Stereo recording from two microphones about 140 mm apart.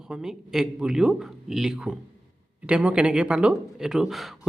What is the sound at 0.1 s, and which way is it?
Speech, 5° right (ahead or behind).